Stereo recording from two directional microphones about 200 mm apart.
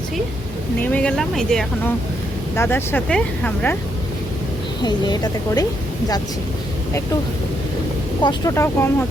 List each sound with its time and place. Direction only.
0.8 s speech: 5° left (ahead or behind)
4.8 s a woman's voice: 20° left (ahead or behind)
8.2 s speech: 20° left (ahead or behind)